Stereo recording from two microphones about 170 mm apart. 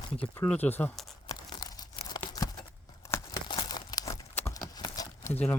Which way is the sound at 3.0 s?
20° left (ahead or behind).